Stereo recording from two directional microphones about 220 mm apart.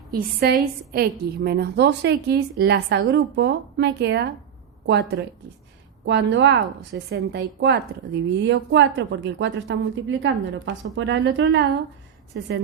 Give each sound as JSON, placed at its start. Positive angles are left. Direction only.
{"t": 0.1, "sound": "a woman's voice", "side_deg": -45}